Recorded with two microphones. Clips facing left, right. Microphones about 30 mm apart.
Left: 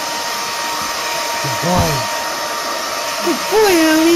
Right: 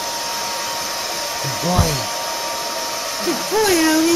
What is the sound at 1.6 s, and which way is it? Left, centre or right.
Hair dryer, left.